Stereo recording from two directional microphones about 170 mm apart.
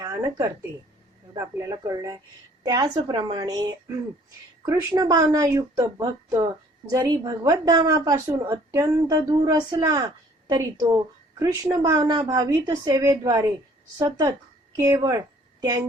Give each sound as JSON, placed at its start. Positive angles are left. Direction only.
{"t": 0.0, "sound": "a woman's voice", "side_deg": -20}